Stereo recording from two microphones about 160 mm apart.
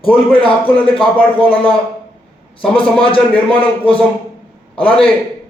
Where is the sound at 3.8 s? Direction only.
10° left (ahead or behind).